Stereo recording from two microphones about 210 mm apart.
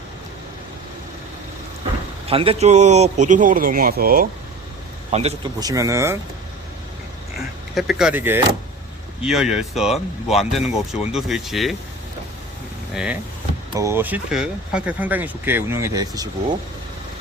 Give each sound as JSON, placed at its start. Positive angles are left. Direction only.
{"t": 2.2, "sound": "speech", "side_deg": -25}
{"t": 5.1, "sound": "speech", "side_deg": -30}
{"t": 5.5, "sound": "speech", "side_deg": -15}
{"t": 7.8, "sound": "speech", "side_deg": 0}
{"t": 12.9, "sound": "speech", "side_deg": -5}